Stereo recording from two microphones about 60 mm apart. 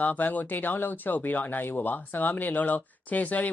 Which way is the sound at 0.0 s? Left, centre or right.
Left.